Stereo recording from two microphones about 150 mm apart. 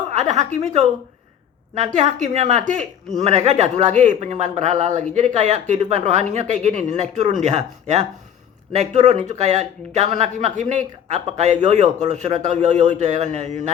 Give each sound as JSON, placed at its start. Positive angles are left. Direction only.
{"t": 0.1, "sound": "a woman's voice", "side_deg": -50}